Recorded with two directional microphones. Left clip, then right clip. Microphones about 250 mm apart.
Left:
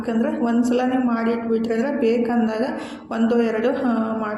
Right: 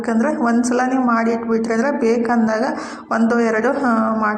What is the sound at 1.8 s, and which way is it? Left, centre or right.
Speech, centre.